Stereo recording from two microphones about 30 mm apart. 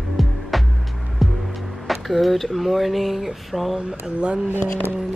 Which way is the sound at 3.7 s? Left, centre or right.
Right.